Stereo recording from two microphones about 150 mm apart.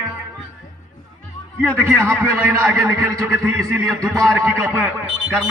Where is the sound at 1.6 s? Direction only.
10° right (ahead or behind).